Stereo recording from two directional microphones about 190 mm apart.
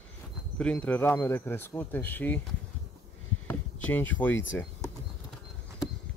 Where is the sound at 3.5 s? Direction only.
10° left (ahead or behind).